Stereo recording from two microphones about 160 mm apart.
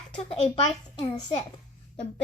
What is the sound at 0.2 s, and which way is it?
Speech, 35° left (ahead or behind).